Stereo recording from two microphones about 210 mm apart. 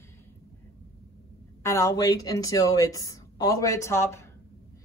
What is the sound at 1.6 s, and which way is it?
Speech, 15° left (ahead or behind).